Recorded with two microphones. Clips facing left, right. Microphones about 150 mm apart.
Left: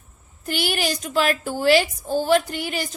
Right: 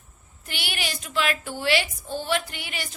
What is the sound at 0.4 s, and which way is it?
A woman's voice, 40° left (ahead or behind).